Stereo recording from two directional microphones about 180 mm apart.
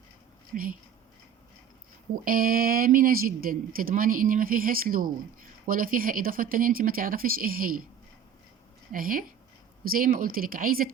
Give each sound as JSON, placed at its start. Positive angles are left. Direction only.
{"t": 0.5, "sound": "speech", "side_deg": -50}
{"t": 2.2, "sound": "speech", "side_deg": -55}
{"t": 8.9, "sound": "speech", "side_deg": -50}